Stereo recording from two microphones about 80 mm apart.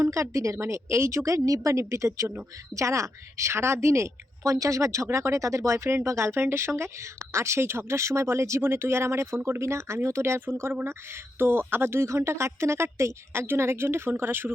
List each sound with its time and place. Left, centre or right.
0.0 s a woman's voice: right